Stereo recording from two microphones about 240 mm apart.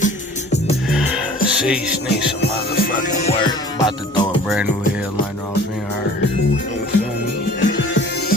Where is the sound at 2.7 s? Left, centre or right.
Left.